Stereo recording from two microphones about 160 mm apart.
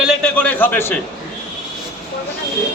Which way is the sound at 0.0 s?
Centre (ahead or behind).